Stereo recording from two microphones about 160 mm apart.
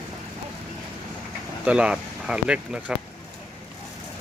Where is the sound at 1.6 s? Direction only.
5° right (ahead or behind).